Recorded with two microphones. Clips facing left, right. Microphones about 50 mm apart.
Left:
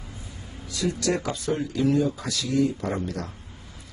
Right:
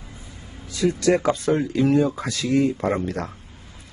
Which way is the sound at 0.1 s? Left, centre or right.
Right.